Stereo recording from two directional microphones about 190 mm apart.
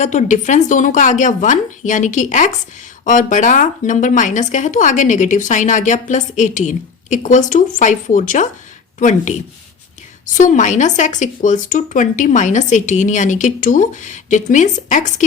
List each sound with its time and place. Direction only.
0.0 s speech: 40° left (ahead or behind)